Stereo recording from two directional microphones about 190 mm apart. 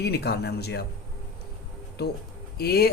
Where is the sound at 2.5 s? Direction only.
55° left (ahead or behind).